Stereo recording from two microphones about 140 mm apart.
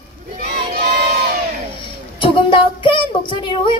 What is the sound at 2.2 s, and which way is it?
Music, 40° left (ahead or behind).